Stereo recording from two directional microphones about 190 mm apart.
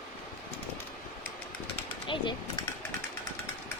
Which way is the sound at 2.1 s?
25° left (ahead or behind).